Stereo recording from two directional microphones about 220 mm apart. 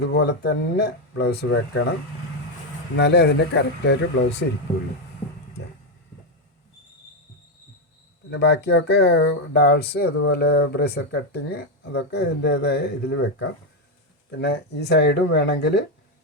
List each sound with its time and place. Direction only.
0.1 s speech: 50° left (ahead or behind)
2.9 s speech: 50° left (ahead or behind)
8.3 s speech: 50° left (ahead or behind)
14.3 s speech: 50° left (ahead or behind)